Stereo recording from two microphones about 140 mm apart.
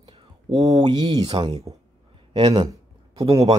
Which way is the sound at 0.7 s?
30° right (ahead or behind).